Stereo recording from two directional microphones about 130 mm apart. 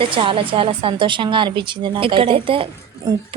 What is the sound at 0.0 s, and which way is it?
A woman's voice, 45° right (ahead or behind).